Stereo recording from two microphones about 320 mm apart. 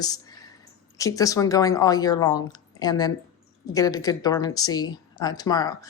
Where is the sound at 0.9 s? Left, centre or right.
Centre.